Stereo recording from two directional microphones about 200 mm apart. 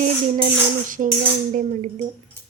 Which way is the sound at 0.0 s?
40° right (ahead or behind).